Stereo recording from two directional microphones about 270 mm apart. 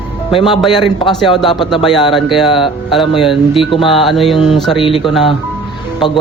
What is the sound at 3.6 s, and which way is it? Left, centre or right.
Music, centre.